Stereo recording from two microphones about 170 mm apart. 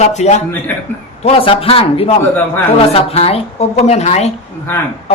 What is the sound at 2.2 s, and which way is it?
Speech, 10° left (ahead or behind).